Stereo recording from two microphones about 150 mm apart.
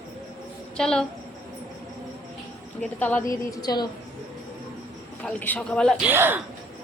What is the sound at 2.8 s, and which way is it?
Speech, 10° left (ahead or behind).